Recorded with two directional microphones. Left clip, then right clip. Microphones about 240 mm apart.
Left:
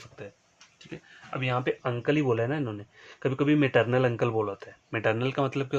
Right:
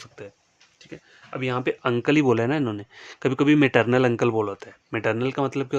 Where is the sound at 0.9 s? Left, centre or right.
Centre.